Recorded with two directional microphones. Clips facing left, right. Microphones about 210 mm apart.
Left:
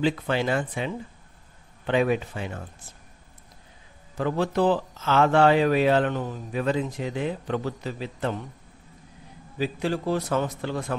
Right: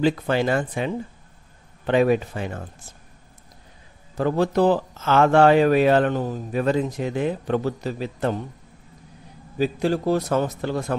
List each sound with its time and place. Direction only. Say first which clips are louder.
0.0 s speech: right 4 dB; 40° right (ahead or behind)
4.2 s speech: right 4 dB; 40° right (ahead or behind)
9.6 s a man's voice: right 5 dB; 40° right (ahead or behind)